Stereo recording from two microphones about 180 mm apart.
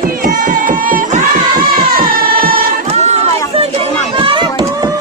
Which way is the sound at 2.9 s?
35° right (ahead or behind).